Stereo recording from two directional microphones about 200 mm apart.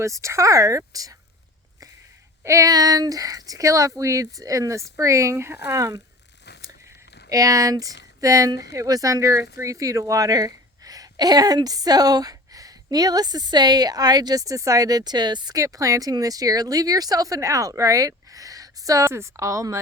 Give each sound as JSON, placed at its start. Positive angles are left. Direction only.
{"t": 0.0, "sound": "speech", "side_deg": -15}
{"t": 2.4, "sound": "speech", "side_deg": -15}
{"t": 7.3, "sound": "speech", "side_deg": -15}